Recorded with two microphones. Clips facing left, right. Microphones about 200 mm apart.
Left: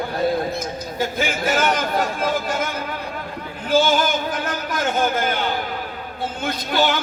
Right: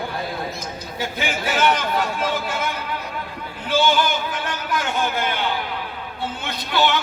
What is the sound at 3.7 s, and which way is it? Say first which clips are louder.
Speech: left 2 dB; 45° left (ahead or behind).